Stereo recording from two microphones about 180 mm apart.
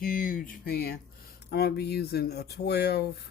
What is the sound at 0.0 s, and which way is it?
Speech, 50° left (ahead or behind).